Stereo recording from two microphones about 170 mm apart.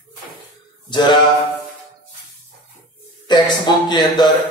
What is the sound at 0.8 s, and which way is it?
Speech, 25° left (ahead or behind).